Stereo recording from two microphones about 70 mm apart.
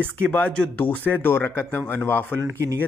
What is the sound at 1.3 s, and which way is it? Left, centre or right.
Speech, left.